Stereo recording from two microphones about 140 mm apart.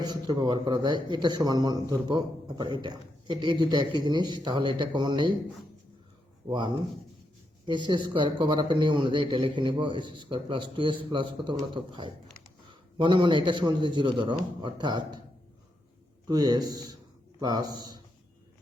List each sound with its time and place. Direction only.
0.0 s a man's voice: 30° right (ahead or behind)
6.5 s a man's voice: 30° right (ahead or behind)
7.9 s a man's voice: 35° right (ahead or behind)
16.3 s a man's voice: 30° right (ahead or behind)